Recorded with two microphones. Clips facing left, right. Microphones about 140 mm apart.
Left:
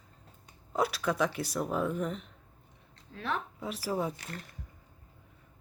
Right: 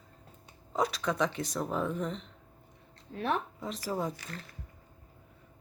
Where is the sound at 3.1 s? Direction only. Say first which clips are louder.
Right 4 dB; 35° right (ahead or behind).